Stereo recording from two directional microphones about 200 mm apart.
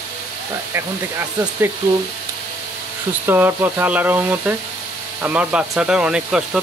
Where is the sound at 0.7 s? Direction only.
10° right (ahead or behind).